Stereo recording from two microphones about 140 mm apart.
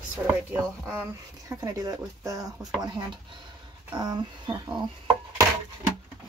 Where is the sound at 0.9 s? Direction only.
20° right (ahead or behind).